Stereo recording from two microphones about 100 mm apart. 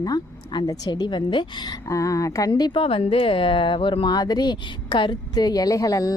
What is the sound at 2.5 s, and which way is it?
Speech, 60° left (ahead or behind).